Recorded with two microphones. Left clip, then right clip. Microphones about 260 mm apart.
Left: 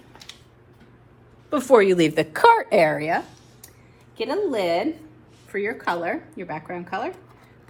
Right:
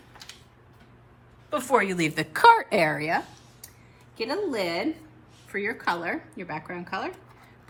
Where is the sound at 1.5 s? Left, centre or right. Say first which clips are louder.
Left 7 dB; centre.